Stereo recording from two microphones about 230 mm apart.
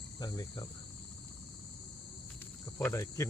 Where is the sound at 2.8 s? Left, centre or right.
Centre.